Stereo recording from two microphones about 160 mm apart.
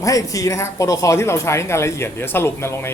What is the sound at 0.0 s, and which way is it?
Speech, 20° left (ahead or behind).